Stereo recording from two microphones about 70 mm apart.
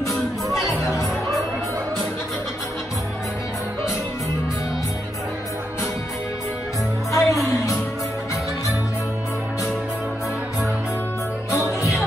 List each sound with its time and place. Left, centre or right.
0.7 s music: centre
7.1 s music: left
11.5 s music: left